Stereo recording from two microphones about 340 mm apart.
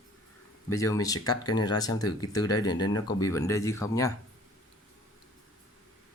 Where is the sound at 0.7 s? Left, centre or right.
Centre.